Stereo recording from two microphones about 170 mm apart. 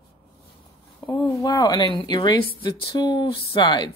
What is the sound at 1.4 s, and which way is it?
Speech, 25° left (ahead or behind).